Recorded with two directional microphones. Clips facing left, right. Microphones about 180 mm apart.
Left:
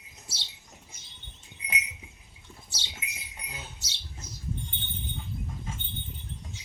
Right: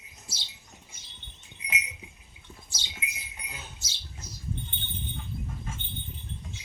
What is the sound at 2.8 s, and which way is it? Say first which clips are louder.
Rodents: right 3 dB; 70° left (ahead or behind).